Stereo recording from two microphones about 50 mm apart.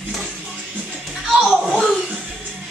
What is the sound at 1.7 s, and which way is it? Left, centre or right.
Music, centre.